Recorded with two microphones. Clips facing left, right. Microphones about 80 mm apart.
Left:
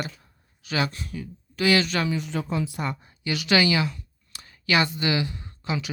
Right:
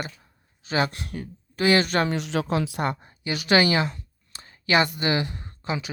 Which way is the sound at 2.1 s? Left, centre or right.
Right.